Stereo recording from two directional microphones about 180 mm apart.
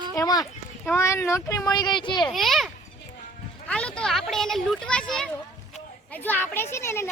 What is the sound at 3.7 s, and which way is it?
Children playing, 5° left (ahead or behind).